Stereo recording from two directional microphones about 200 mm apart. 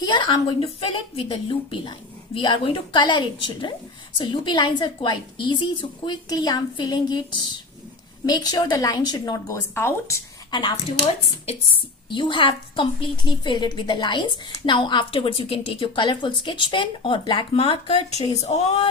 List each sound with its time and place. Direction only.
0.0 s a woman's voice: 20° left (ahead or behind)
12.0 s a woman's voice: 25° left (ahead or behind)